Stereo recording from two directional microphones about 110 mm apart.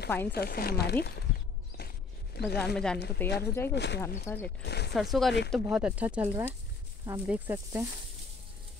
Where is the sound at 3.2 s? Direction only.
20° left (ahead or behind).